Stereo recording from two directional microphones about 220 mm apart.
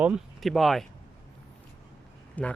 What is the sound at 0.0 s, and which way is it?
Speech, centre (ahead or behind).